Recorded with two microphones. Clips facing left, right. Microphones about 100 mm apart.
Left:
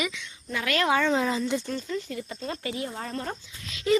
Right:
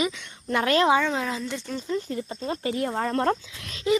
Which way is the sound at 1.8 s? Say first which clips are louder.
Right 4 dB; 30° right (ahead or behind).